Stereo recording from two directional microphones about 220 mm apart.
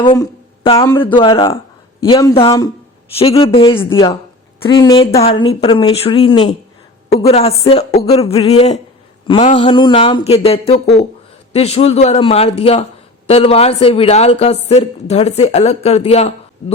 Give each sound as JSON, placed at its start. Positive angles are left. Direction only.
{"t": 0.0, "sound": "a woman's voice", "side_deg": 20}
{"t": 9.2, "sound": "a sound", "side_deg": 25}
{"t": 9.6, "sound": "a woman's voice", "side_deg": 20}